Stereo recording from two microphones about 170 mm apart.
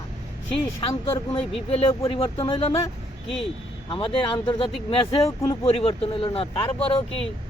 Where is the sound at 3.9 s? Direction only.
30° left (ahead or behind).